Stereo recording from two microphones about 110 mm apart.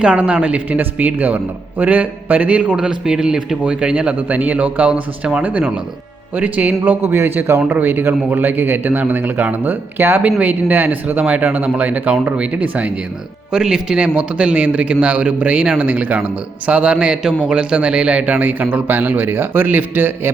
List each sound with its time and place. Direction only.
0.0 s a man's voice: 10° right (ahead or behind)